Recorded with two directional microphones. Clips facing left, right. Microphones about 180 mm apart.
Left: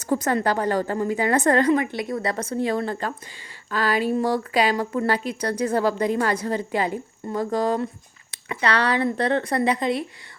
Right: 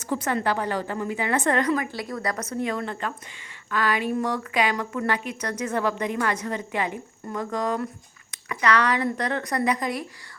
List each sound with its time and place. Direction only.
0.0 s speech: 40° left (ahead or behind)